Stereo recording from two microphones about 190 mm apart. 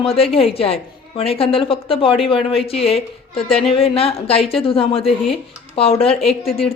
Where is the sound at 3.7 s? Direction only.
30° left (ahead or behind).